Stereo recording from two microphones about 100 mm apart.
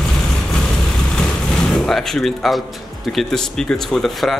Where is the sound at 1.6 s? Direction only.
5° left (ahead or behind).